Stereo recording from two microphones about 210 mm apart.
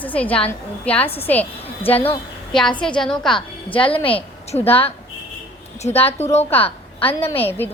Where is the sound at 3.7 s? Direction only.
25° left (ahead or behind).